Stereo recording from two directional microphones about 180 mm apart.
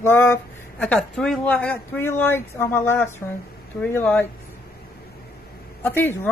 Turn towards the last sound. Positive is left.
turn(degrees=10)  # may be behind; listen again after turning